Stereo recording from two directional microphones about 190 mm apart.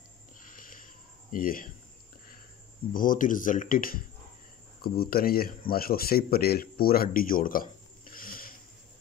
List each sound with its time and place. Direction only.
0.4 s a sound: 45° left (ahead or behind)
1.3 s speech: 45° left (ahead or behind)
2.9 s speech: 45° left (ahead or behind)